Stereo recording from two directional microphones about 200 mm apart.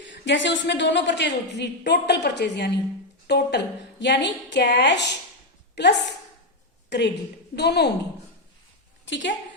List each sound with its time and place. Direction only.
0.0 s a woman's voice: 65° left (ahead or behind)
9.0 s a woman's voice: 65° left (ahead or behind)